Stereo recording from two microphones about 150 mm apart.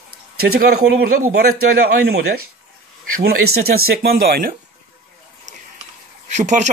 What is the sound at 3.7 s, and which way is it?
Speech, 85° right.